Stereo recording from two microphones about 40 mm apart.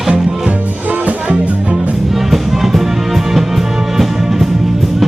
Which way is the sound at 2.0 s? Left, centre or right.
Centre.